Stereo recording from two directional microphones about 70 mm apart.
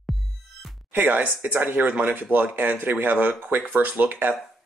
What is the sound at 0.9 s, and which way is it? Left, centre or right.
Speech, right.